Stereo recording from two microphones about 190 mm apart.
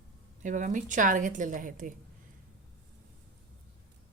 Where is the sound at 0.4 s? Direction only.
40° right (ahead or behind).